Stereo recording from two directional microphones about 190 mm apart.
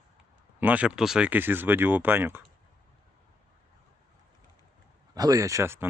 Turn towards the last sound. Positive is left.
turn(degrees=-15)  # may be behind; listen again after turning